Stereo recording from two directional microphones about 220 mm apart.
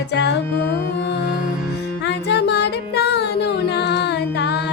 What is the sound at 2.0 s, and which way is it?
Music, 50° left (ahead or behind).